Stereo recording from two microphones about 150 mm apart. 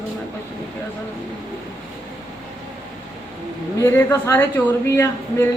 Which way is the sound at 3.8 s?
15° left (ahead or behind).